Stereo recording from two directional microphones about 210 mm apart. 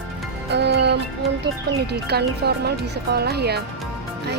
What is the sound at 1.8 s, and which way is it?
Speech, 50° right (ahead or behind).